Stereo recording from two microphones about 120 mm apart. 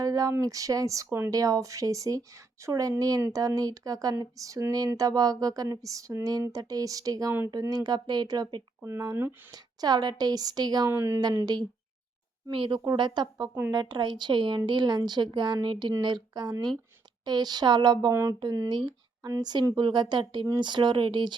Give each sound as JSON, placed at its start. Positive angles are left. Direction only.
{"t": 0.0, "sound": "a woman's voice", "side_deg": -30}
{"t": 10.9, "sound": "speech", "side_deg": -20}
{"t": 11.2, "sound": "a woman's voice", "side_deg": -35}
{"t": 12.5, "sound": "a woman's voice", "side_deg": -45}
{"t": 18.1, "sound": "a woman's voice", "side_deg": -25}